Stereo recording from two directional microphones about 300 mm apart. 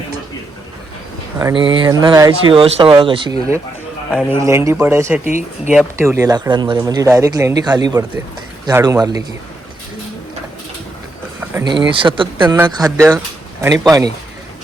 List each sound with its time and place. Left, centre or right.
1.4 s speech: centre
4.1 s speech: centre
11.3 s speech: centre